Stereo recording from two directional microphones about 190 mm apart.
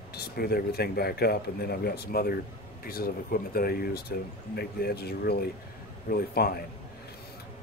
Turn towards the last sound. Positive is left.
turn(degrees=55)  # may be behind; listen again after turning